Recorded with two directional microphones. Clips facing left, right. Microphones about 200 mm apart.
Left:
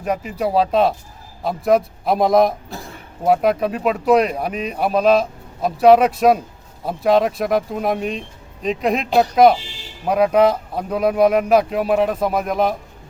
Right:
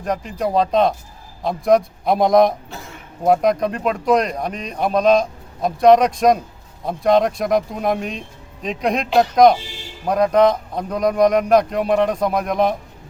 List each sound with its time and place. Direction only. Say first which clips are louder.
0.0 s speech: left 1 dB; 5° left (ahead or behind)
2.6 s a sound: left 2 dB; 35° left (ahead or behind)
3.2 s speech: even; 5° left (ahead or behind)